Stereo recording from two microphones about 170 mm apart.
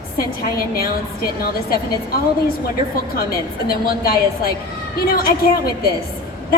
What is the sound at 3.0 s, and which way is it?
A woman's voice, 65° left (ahead or behind).